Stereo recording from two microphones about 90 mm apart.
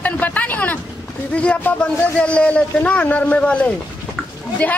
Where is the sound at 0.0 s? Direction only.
20° left (ahead or behind).